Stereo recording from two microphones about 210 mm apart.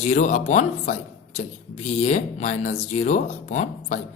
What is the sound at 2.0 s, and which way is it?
Speech, 35° left (ahead or behind).